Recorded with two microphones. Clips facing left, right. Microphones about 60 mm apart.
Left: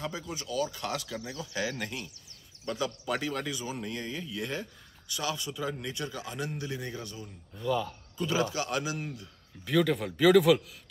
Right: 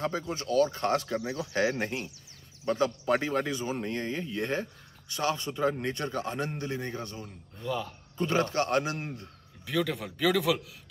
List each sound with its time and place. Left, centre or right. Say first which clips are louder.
0.3 s speech: right 7 dB; right
7.2 s speech: left 3 dB; centre
8.2 s a man's voice: right 3 dB; right
9.7 s a man's voice: left 4 dB; centre